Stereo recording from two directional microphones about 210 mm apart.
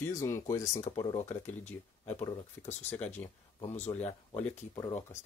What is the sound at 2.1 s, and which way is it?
Speech, 30° left (ahead or behind).